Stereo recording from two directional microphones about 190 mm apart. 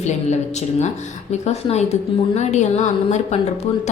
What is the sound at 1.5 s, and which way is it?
A woman's voice, 35° left (ahead or behind).